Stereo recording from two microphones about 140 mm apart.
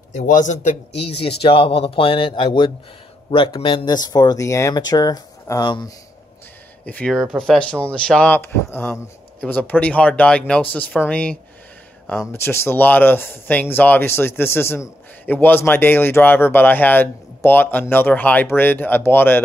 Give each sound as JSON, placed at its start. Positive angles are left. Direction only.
{"t": 0.3, "sound": "speech", "side_deg": 65}
{"t": 6.8, "sound": "speech", "side_deg": 10}